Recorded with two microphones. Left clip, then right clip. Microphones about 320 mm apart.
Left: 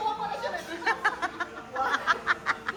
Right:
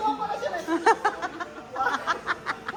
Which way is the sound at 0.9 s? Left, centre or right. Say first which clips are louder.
Right 4 dB; centre.